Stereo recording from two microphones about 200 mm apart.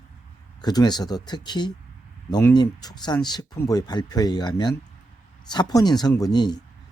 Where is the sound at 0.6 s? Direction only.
20° left (ahead or behind).